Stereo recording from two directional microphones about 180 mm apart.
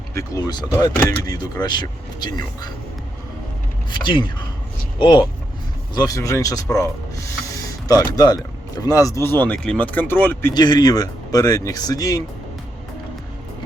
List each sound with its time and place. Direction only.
0.1 s speech: 15° left (ahead or behind)
3.8 s speech: 25° left (ahead or behind); by 10.5 s 10° left (ahead or behind)
10.5 s speech: 25° left (ahead or behind)